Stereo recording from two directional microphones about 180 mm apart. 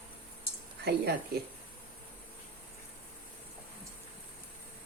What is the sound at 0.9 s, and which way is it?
Speech, 65° right (ahead or behind).